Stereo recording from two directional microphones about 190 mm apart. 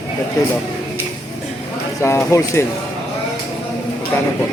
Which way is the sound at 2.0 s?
15° left (ahead or behind).